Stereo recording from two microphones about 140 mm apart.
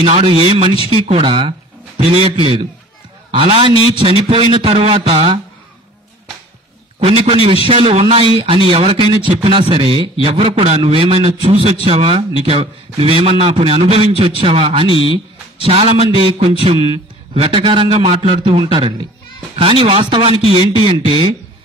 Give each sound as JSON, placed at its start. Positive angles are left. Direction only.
{"t": 0.0, "sound": "a man's voice", "side_deg": -45}
{"t": 7.0, "sound": "a man's voice", "side_deg": -40}